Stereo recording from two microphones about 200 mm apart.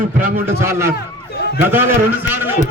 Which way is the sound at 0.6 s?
15° right (ahead or behind).